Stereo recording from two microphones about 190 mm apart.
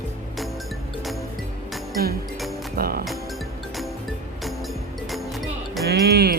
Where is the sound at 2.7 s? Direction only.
50° right (ahead or behind).